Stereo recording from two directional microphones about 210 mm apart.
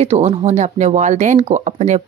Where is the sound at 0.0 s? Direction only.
30° right (ahead or behind).